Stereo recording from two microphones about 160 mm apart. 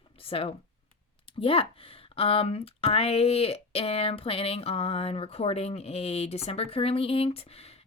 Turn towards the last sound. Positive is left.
turn(degrees=40)  # may be behind; listen again after turning